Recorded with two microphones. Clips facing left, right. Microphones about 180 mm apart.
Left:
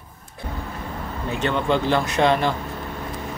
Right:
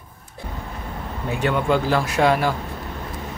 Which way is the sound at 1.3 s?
10° right (ahead or behind).